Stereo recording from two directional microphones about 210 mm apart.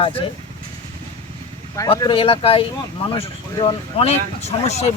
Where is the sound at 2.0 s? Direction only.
25° left (ahead or behind).